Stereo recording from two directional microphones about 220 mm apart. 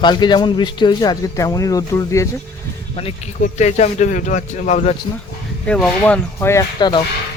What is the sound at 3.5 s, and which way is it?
A man's voice, 30° left (ahead or behind).